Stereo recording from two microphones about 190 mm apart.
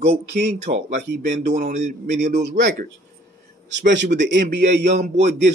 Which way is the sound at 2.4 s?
65° right (ahead or behind).